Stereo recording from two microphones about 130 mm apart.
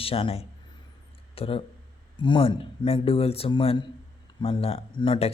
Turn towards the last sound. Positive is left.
turn(degrees=45)  # may be behind; listen again after turning